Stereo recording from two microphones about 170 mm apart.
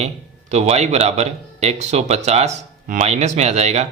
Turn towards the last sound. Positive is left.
turn(degrees=-40)  # may be behind; listen again after turning